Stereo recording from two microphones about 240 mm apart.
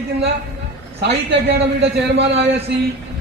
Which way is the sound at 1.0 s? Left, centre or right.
Right.